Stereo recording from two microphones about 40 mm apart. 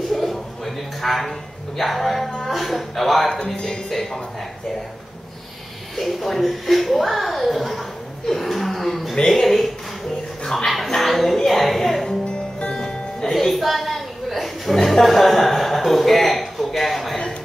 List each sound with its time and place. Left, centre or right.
0.1 s a sound: centre
1.8 s speech: centre
3.5 s speech: centre
5.9 s speech: centre
8.3 s a sound: centre
9.1 s speech: centre
10.9 s music: centre
12.3 s music: left
13.4 s a sound: centre